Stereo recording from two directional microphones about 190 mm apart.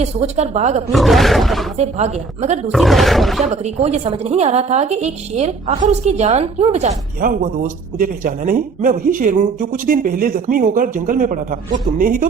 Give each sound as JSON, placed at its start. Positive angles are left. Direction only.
{"t": 0.0, "sound": "a woman's voice", "side_deg": -35}
{"t": 0.9, "sound": "speech", "side_deg": 0}
{"t": 1.7, "sound": "a woman's voice", "side_deg": -35}
{"t": 2.7, "sound": "speech", "side_deg": 0}
{"t": 3.4, "sound": "a woman's voice", "side_deg": -35}
{"t": 7.2, "sound": "speech", "side_deg": -50}